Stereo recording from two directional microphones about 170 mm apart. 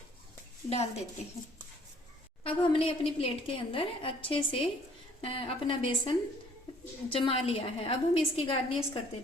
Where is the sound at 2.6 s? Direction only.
35° left (ahead or behind).